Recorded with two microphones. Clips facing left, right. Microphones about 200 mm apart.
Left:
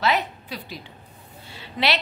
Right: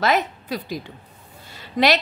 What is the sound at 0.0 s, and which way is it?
A woman's voice, 45° right (ahead or behind).